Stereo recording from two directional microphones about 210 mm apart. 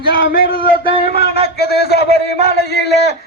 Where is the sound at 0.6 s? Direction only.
25° right (ahead or behind).